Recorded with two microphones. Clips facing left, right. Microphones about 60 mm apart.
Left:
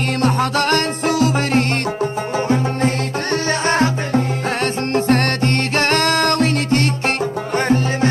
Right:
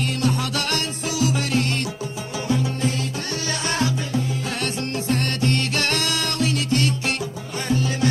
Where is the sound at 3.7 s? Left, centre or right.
Left.